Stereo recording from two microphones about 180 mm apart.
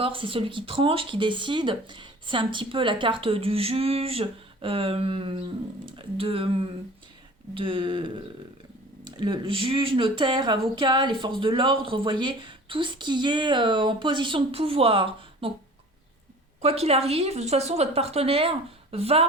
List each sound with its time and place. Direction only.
0.0 s speech: 30° right (ahead or behind)
16.6 s speech: 35° right (ahead or behind)